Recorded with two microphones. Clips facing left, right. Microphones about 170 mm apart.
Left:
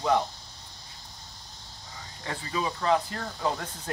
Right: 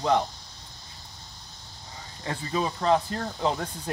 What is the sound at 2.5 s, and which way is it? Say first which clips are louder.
Speech: right 2 dB; 35° right (ahead or behind).